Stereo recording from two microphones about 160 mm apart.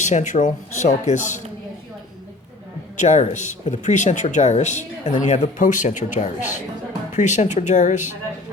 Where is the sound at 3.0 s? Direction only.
50° left (ahead or behind).